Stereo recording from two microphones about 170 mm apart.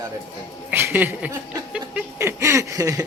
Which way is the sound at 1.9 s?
15° right (ahead or behind).